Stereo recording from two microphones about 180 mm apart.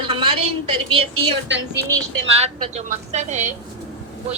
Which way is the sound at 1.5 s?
75° right (ahead or behind).